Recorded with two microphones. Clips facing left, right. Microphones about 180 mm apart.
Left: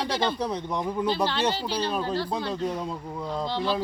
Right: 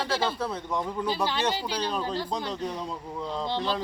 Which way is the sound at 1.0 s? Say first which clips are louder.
Left 2 dB; 10° right (ahead or behind).